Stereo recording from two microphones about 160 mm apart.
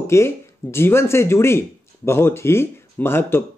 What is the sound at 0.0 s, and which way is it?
Speech, 15° left (ahead or behind).